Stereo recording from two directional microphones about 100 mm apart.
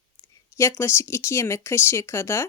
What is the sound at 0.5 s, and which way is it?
Speech, 25° left (ahead or behind).